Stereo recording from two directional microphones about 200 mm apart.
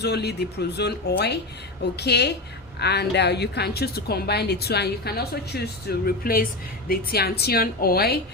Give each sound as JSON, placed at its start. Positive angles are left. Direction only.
{"t": 0.0, "sound": "speech", "side_deg": 55}